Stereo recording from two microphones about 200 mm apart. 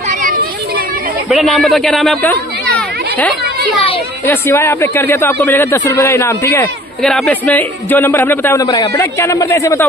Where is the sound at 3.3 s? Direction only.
55° right (ahead or behind).